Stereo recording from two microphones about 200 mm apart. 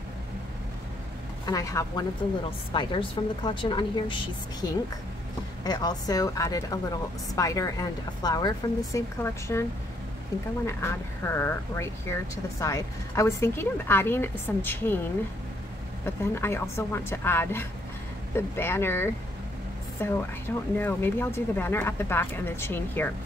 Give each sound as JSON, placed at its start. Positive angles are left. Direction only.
{"t": 1.4, "sound": "a woman's voice", "side_deg": 15}
{"t": 5.6, "sound": "speech", "side_deg": 20}
{"t": 10.7, "sound": "speech", "side_deg": 10}
{"t": 16.2, "sound": "speech", "side_deg": 10}